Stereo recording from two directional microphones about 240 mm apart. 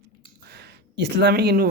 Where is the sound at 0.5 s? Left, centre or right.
Right.